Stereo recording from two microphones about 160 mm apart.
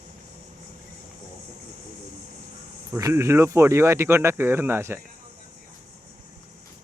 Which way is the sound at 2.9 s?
20° right (ahead or behind).